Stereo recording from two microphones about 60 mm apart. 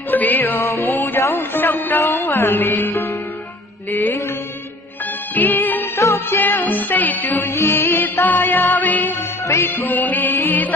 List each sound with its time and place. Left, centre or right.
0.1 s music: left
0.8 s mantra: left
1.2 s music: left
5.3 s music: left
5.9 s music: left
6.3 s music: left